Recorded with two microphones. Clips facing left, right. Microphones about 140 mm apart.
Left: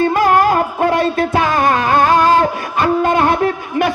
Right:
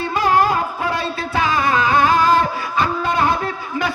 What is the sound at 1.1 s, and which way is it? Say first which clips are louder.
Music: left 5 dB; 55° left (ahead or behind).